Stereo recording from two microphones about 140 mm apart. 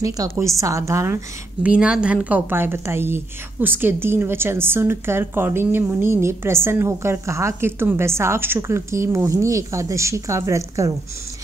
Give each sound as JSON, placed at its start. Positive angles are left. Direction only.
{"t": 0.0, "sound": "a woman's voice", "side_deg": -25}